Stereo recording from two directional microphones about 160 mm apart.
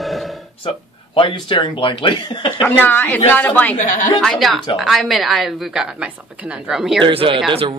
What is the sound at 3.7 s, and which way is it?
Speech, 55° left (ahead or behind).